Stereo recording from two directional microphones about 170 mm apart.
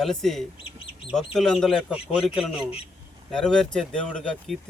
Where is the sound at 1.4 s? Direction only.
5° left (ahead or behind).